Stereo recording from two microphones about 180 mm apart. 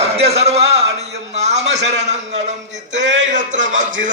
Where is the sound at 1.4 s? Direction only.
40° right (ahead or behind).